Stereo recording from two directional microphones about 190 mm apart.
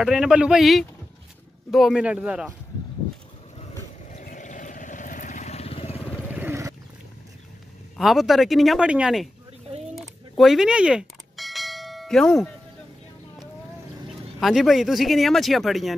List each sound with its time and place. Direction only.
0.0 s speech: 5° right (ahead or behind)
4.1 s vehicle: 40° left (ahead or behind)
6.3 s wild animals: 10° right (ahead or behind)
8.0 s speech: centre (ahead or behind)
9.9 s bell: centre (ahead or behind)
14.4 s speech: centre (ahead or behind)